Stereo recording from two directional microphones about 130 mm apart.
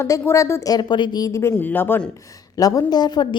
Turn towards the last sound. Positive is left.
turn(degrees=30)  # may be behind; listen again after turning